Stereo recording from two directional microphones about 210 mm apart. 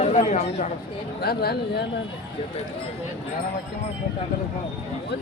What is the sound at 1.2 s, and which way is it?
Speech, 50° left (ahead or behind).